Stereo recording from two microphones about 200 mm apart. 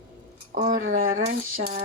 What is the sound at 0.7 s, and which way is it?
Speech, 40° right (ahead or behind).